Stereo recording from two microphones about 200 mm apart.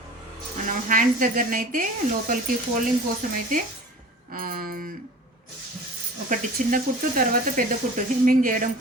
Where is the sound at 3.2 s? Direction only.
45° right (ahead or behind).